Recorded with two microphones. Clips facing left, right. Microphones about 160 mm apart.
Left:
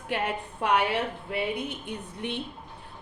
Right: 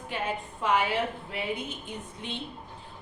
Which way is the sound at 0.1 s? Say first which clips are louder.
Left 3 dB; 70° left (ahead or behind).